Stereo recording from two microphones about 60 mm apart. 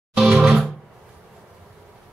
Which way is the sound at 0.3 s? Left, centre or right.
Centre.